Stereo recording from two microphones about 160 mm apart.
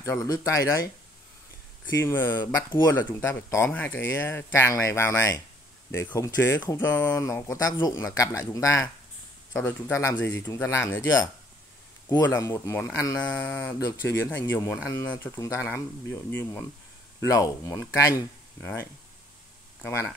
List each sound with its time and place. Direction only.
0.2 s speech: 20° left (ahead or behind)
2.0 s speech: 15° left (ahead or behind)
19.8 s speech: 15° left (ahead or behind)